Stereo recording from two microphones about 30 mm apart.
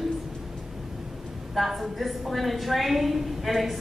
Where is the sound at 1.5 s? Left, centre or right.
Centre.